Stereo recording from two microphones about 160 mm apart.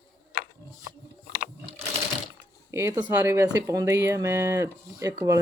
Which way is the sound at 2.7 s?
20° right (ahead or behind).